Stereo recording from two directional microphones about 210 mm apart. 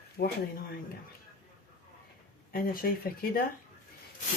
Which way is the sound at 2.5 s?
45° left (ahead or behind).